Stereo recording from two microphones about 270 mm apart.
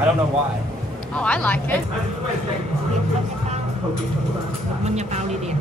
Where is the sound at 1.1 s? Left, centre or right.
Centre.